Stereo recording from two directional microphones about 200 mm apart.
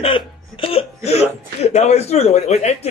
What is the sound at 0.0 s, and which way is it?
Speech, 25° left (ahead or behind).